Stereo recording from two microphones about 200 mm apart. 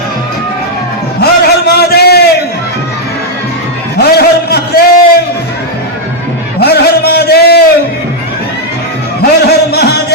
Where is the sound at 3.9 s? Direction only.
50° left (ahead or behind).